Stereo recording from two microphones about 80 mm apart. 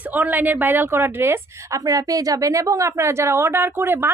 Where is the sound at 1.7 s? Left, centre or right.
Right.